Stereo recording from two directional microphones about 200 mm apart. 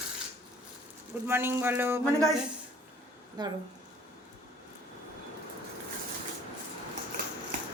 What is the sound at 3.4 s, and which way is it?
Speech, 20° right (ahead or behind).